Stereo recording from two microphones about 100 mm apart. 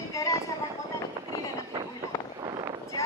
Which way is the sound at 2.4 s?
45° right (ahead or behind).